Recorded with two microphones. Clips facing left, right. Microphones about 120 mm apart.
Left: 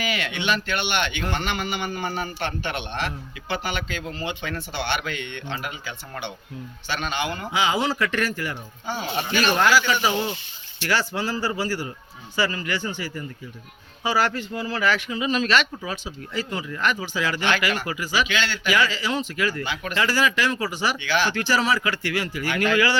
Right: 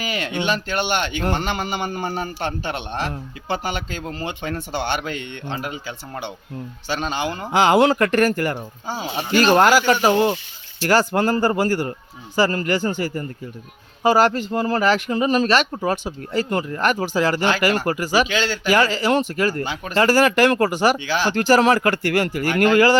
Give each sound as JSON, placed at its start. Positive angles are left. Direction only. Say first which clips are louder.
{"t": 0.0, "sound": "speech", "louder": "right 3 dB", "side_deg": -35}
{"t": 6.8, "sound": "speech", "louder": "right 3 dB", "side_deg": -35}
{"t": 7.5, "sound": "a man's voice", "louder": "right 9 dB", "side_deg": -55}
{"t": 8.9, "sound": "a man's voice", "louder": "right 3 dB", "side_deg": -35}
{"t": 21.1, "sound": "a man's voice", "louder": "right 5 dB", "side_deg": -35}